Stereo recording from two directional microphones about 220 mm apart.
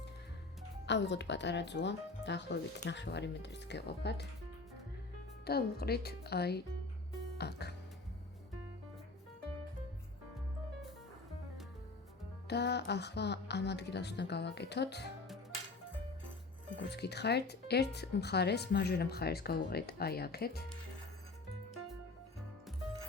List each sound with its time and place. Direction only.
0.9 s speech: 55° left (ahead or behind)
5.5 s speech: 45° left (ahead or behind)
7.3 s music: 50° left (ahead or behind)
12.5 s speech: 50° left (ahead or behind)
16.7 s speech: 50° left (ahead or behind)